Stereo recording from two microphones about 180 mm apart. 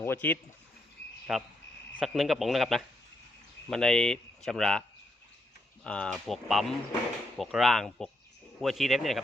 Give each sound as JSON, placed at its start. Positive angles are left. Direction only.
{"t": 0.0, "sound": "speech", "side_deg": 10}
{"t": 1.3, "sound": "speech", "side_deg": 0}
{"t": 5.8, "sound": "speech", "side_deg": 5}